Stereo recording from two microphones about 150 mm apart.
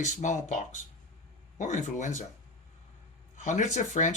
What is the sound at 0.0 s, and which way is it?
Speech, 55° left (ahead or behind).